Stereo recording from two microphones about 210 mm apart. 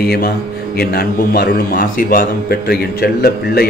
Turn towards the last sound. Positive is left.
turn(degrees=45)  # may be behind; listen again after turning